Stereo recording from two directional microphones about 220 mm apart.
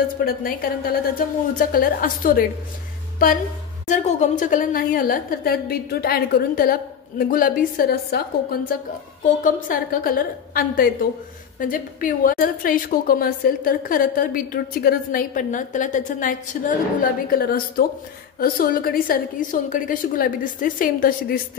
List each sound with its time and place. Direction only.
0.2 s a woman's voice: 40° left (ahead or behind)
3.8 s a woman's voice: 35° left (ahead or behind)